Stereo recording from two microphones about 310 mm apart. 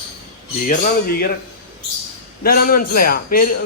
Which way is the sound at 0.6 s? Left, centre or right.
Left.